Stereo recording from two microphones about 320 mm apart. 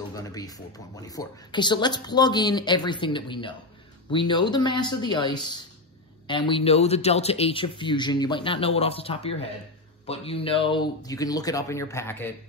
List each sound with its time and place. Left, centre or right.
0.1 s speech: centre